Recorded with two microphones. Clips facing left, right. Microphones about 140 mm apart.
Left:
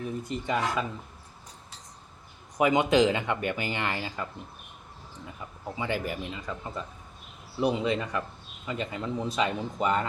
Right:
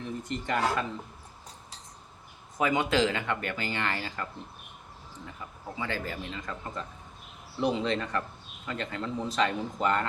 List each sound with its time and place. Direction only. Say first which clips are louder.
0.3 s speech: right 1 dB; 10° left (ahead or behind)
2.6 s speech: left 4 dB; 20° left (ahead or behind)
5.7 s speech: left 3 dB; 15° left (ahead or behind)